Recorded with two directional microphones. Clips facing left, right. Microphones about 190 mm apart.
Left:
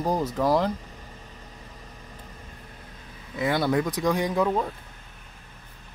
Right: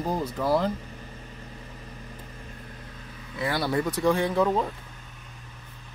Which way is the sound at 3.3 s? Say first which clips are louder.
Left 3 dB; 15° left (ahead or behind).